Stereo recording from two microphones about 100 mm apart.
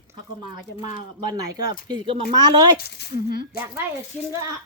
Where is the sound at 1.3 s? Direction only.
45° right (ahead or behind).